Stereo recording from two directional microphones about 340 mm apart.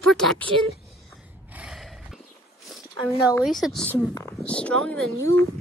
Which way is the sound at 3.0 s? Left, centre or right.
Centre.